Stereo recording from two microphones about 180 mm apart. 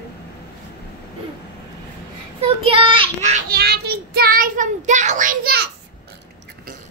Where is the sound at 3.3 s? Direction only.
55° right (ahead or behind).